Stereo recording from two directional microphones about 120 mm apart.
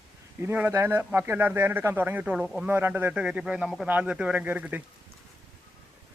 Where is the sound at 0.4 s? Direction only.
20° right (ahead or behind).